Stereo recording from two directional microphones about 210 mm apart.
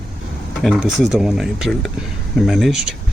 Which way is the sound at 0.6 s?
Centre (ahead or behind).